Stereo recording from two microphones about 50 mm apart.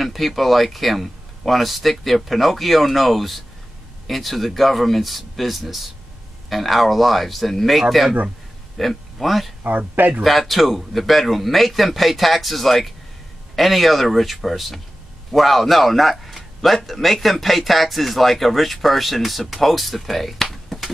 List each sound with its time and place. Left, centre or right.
0.0 s speech: centre
9.6 s speech: right
10.2 s speech: centre